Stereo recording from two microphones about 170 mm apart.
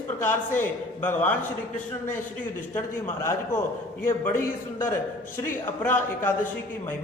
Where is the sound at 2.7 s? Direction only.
15° left (ahead or behind).